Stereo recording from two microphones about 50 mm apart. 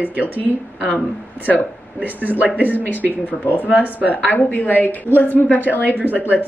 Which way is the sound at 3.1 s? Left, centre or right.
Left.